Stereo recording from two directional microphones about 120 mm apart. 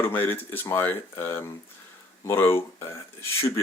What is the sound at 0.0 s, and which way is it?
Speech, 15° left (ahead or behind).